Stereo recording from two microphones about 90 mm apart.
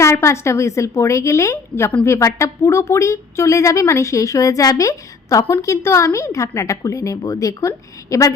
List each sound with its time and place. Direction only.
0.0 s speech: 30° left (ahead or behind)